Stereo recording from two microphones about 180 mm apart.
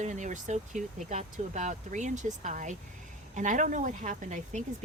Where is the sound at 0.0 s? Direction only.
45° right (ahead or behind).